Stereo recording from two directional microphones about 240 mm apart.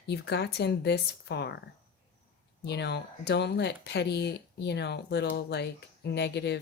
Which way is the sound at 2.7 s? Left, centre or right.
Left.